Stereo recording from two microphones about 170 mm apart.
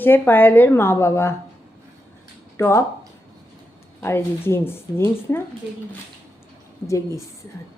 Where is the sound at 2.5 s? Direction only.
15° left (ahead or behind).